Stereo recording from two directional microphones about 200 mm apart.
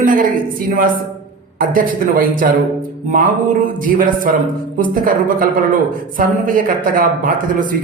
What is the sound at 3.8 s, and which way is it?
A man's voice, 45° right (ahead or behind).